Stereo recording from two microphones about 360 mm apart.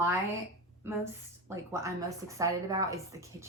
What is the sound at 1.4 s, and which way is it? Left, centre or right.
A woman's voice, centre.